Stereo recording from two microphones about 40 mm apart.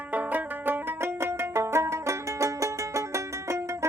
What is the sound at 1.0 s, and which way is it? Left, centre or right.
Music, right.